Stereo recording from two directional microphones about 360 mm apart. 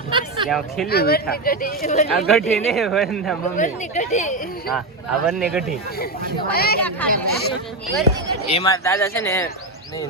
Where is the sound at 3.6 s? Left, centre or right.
Centre.